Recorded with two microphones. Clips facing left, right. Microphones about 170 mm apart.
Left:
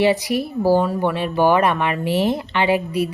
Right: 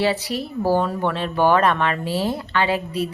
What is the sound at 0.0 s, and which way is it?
Speech, 15° left (ahead or behind).